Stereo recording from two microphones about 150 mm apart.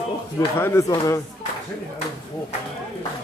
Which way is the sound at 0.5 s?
15° left (ahead or behind).